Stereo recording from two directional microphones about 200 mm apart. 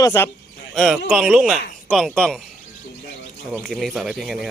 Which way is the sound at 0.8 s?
Centre (ahead or behind).